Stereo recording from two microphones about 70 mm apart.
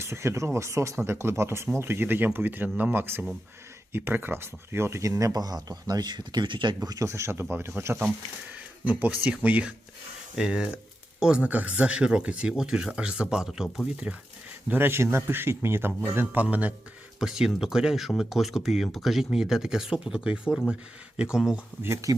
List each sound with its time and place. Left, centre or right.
0.0 s a man's voice: right
6.8 s a man's voice: right
7.1 s a man's voice: right
8.5 s a sound: right
9.4 s speech: right; by 13.8 s centre
13.9 s speech: centre
14.7 s a man's voice: right
16.2 s speech: right
17.2 s speech: centre